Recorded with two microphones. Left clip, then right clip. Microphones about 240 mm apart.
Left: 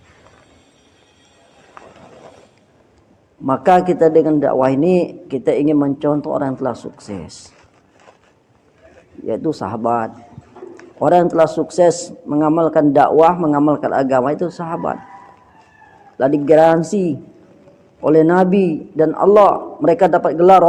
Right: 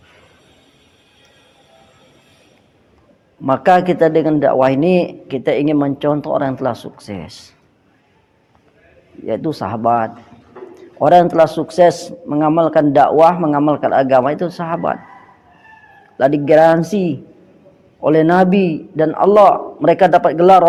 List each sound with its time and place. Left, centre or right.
3.4 s a man's voice: right
9.2 s a man's voice: right
16.1 s a man's voice: right